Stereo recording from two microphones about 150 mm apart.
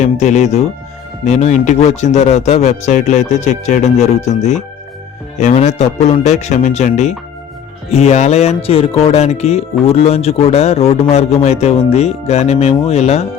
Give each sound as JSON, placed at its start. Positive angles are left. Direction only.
{"t": 0.0, "sound": "speech", "side_deg": 50}